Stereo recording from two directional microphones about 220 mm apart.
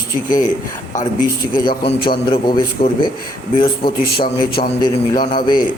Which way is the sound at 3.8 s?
40° left (ahead or behind).